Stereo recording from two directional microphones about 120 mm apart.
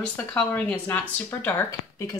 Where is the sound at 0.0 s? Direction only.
10° left (ahead or behind).